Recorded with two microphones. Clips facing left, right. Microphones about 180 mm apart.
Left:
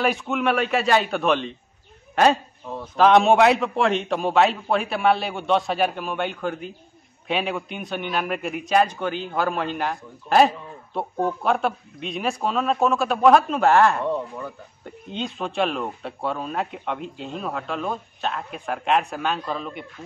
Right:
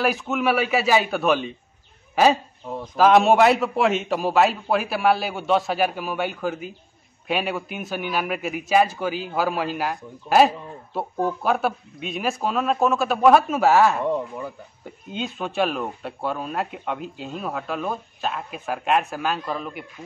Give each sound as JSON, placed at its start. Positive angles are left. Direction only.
{"t": 0.0, "sound": "a man's voice", "side_deg": 0}